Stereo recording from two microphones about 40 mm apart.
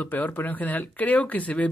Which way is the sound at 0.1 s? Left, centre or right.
Left.